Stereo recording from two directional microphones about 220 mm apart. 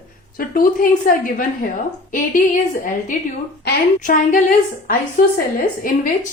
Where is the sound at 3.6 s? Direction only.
35° left (ahead or behind).